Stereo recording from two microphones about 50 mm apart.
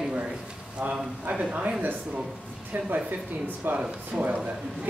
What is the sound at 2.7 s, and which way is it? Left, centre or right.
Speech, right.